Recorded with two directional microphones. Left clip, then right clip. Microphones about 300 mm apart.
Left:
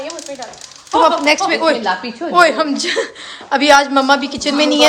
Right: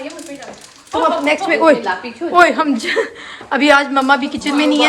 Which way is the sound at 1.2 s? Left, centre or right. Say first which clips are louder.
Right 1 dB; centre.